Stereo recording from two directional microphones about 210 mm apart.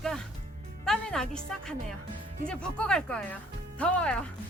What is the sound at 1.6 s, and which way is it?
Speech, 5° left (ahead or behind).